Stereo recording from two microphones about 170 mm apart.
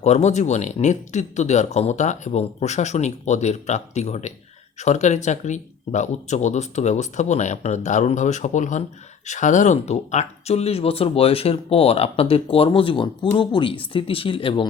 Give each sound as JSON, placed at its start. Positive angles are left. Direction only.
{"t": 0.0, "sound": "speech", "side_deg": 40}